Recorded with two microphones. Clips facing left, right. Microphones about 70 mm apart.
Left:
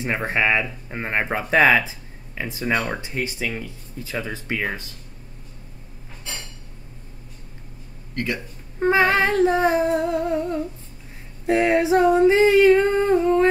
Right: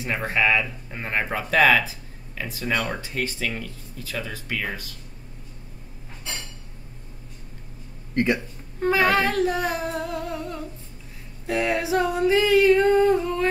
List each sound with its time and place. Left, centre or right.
0.0 s speech: left
8.1 s speech: right
8.7 s speech: left